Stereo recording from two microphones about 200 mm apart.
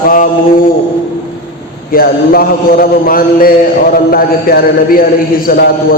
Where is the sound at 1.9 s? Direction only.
45° left (ahead or behind).